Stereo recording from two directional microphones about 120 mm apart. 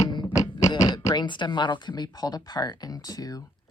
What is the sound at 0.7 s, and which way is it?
Speech, 35° left (ahead or behind).